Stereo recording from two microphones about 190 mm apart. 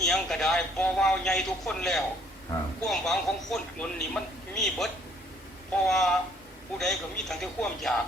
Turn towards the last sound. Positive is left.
turn(degrees=0)  # may be behind; listen again after turning